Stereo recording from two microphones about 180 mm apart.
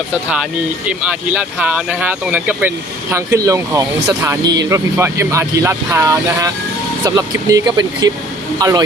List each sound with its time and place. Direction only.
0.9 s speech: 5° right (ahead or behind); by 8.8 s 20° right (ahead or behind)